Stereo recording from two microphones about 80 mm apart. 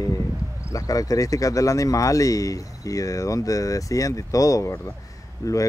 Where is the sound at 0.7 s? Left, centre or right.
Left.